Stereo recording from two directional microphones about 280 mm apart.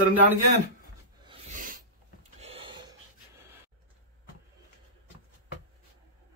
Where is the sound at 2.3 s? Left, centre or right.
Right.